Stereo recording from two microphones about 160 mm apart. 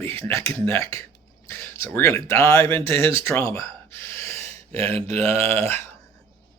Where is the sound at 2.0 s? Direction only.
20° left (ahead or behind).